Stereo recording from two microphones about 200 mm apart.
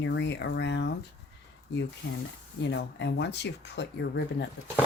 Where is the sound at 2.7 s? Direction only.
60° left (ahead or behind).